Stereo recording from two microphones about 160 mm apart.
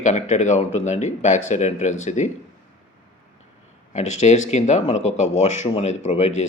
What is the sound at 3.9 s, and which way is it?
Speech, 45° left (ahead or behind).